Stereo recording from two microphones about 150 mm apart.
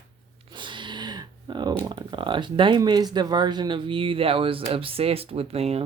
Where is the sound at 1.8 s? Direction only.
30° right (ahead or behind).